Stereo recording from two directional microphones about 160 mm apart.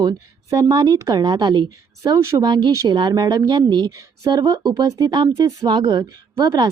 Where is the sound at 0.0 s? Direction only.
25° right (ahead or behind).